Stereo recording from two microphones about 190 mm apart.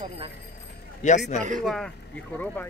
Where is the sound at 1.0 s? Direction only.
40° left (ahead or behind).